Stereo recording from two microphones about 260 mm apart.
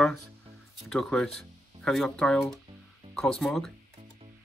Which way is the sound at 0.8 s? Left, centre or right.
Centre.